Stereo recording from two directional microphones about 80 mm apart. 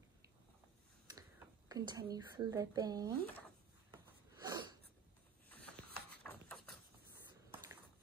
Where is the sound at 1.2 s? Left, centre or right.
Right.